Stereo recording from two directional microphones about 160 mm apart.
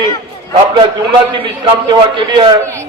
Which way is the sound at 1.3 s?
30° right (ahead or behind).